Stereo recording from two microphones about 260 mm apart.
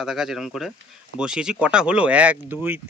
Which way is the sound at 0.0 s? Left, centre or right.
Centre.